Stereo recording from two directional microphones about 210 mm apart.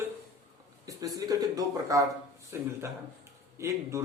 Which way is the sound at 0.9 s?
15° right (ahead or behind).